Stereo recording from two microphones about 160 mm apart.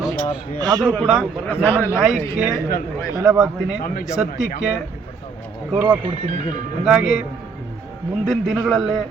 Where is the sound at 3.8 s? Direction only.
65° left (ahead or behind).